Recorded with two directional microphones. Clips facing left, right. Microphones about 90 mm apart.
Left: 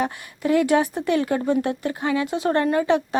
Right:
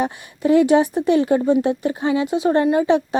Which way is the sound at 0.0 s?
25° right (ahead or behind).